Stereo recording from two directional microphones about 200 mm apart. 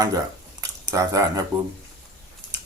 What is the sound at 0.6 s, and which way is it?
Speech, 15° right (ahead or behind).